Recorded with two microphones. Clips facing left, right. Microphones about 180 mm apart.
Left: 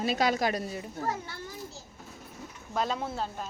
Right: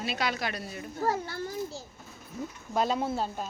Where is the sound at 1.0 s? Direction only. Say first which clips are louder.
Right 7 dB; 35° right (ahead or behind).